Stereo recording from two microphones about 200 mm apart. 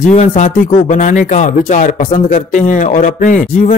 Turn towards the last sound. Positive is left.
turn(degrees=40)  # may be behind; listen again after turning